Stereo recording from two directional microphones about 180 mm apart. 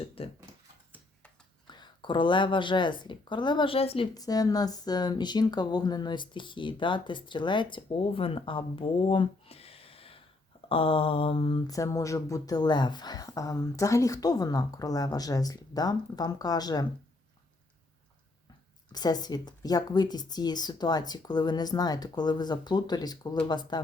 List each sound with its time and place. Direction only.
0.2 s a sound: 30° left (ahead or behind)
1.6 s a woman's voice: 25° left (ahead or behind)
18.9 s a woman's voice: 20° left (ahead or behind)